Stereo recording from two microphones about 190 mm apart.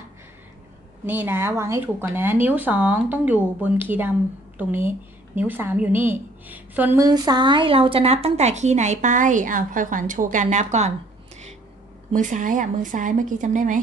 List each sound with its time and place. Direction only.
1.0 s speech: 10° right (ahead or behind)
7.1 s a woman's voice: 20° right (ahead or behind)
12.1 s speech: 40° right (ahead or behind)